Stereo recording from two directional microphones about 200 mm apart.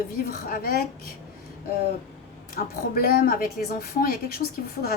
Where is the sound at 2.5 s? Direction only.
50° left (ahead or behind).